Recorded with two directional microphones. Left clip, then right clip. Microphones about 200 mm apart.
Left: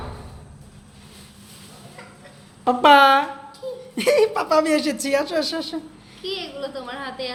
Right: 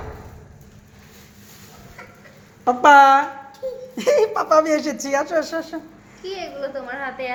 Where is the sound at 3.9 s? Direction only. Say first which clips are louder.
Even; 10° left (ahead or behind); by 7.3 s 30° left (ahead or behind).